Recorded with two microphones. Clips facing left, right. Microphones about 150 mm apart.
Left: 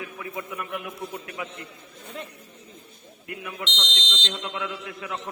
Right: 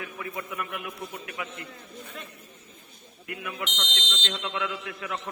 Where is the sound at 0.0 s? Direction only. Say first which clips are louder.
Left 1 dB; 20° left (ahead or behind).